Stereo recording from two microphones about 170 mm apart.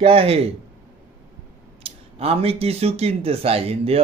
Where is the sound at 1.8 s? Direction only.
35° right (ahead or behind).